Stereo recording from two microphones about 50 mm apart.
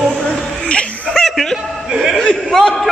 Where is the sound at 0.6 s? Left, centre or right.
Left.